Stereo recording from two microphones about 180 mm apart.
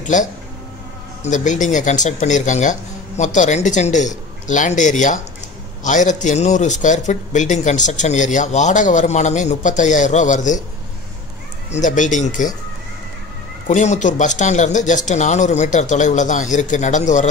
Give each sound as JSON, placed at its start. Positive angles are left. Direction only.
{"t": 0.1, "sound": "speech", "side_deg": 45}
{"t": 11.7, "sound": "speech", "side_deg": 45}
{"t": 13.7, "sound": "speech", "side_deg": 40}